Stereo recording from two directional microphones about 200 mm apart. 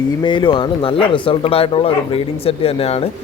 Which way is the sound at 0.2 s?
25° left (ahead or behind).